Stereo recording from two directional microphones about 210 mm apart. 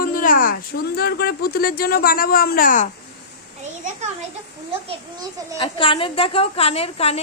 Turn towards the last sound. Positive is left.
turn(degrees=30)  # may be behind; listen again after turning